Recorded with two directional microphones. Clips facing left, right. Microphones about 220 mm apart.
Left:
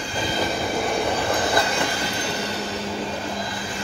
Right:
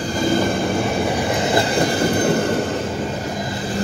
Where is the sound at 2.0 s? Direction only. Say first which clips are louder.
Right 10 dB; 50° right (ahead or behind).